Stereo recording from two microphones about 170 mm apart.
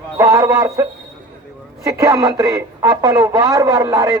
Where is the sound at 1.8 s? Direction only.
20° right (ahead or behind).